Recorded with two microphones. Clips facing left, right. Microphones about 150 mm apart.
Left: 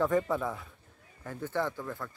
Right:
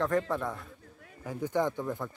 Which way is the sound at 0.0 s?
5° left (ahead or behind).